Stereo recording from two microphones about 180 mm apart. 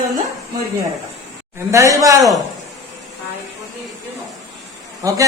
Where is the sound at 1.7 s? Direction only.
15° right (ahead or behind).